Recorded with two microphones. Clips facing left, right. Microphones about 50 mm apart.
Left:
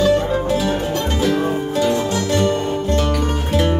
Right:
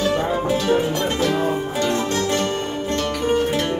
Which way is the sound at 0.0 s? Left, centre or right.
Centre.